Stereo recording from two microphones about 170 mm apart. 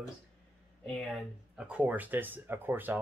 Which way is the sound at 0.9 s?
Centre (ahead or behind).